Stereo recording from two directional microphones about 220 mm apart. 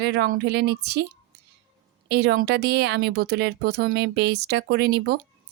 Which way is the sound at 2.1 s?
45° right (ahead or behind).